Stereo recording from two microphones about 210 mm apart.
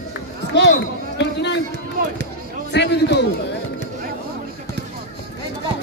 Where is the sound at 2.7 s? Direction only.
55° left (ahead or behind).